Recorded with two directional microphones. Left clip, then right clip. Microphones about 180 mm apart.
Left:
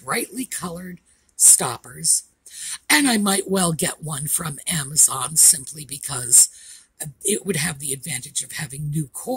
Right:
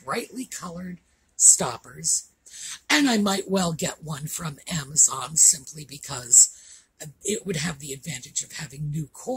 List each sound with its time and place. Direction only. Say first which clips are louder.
0.0 s speech: left 4 dB; 45° left (ahead or behind)